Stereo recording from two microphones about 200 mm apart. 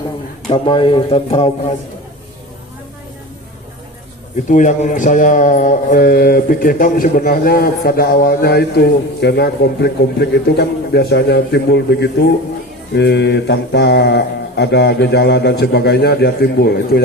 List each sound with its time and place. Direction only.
0.4 s speech: 25° left (ahead or behind)
4.4 s speech: 40° left (ahead or behind); by 12.1 s 60° left (ahead or behind)
12.9 s mantra: 60° left (ahead or behind)